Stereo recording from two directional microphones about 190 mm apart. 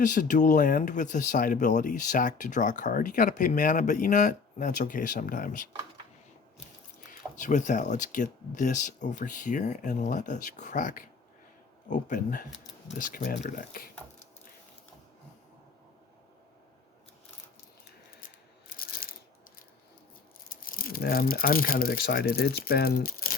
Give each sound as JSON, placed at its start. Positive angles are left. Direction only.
{"t": 0.0, "sound": "speech", "side_deg": 45}
{"t": 7.3, "sound": "speech", "side_deg": 40}
{"t": 18.7, "sound": "coin", "side_deg": 50}
{"t": 20.5, "sound": "speech", "side_deg": 50}